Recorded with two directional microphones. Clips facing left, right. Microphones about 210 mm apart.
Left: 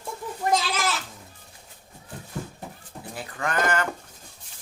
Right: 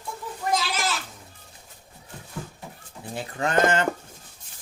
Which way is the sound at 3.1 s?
25° right (ahead or behind).